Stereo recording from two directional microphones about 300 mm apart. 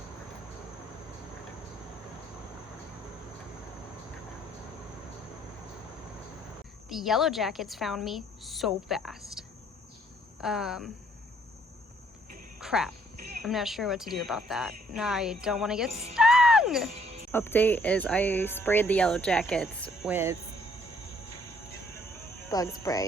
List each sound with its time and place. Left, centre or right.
6.8 s speech: centre
10.4 s speech: centre
12.5 s speech: centre
15.9 s speech: right
16.1 s music: centre
17.3 s speech: centre
22.4 s speech: centre